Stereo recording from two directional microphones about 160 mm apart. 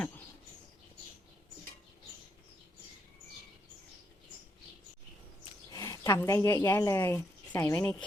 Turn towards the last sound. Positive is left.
turn(degrees=10)  # may be behind; listen again after turning